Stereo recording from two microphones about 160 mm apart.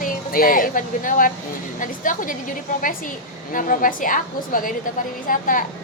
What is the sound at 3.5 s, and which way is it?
A woman's voice, 55° left (ahead or behind).